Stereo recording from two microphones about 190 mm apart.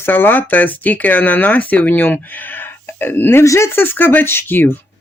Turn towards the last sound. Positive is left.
turn(degrees=10)  # may be behind; listen again after turning